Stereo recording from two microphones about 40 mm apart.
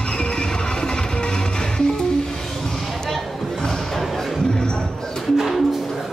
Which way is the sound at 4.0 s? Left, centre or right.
Centre.